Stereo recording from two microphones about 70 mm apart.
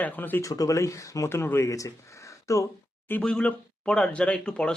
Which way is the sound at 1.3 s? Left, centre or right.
Left.